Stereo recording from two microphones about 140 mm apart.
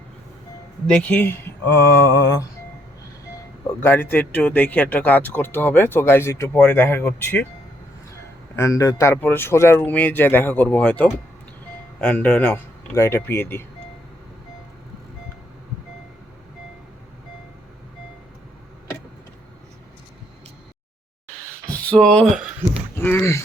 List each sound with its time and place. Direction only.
0.9 s speech: 10° left (ahead or behind)
3.8 s speech: 15° left (ahead or behind)
8.5 s speech: 20° left (ahead or behind)
21.7 s speech: 5° left (ahead or behind)
23.0 s speech: 15° left (ahead or behind)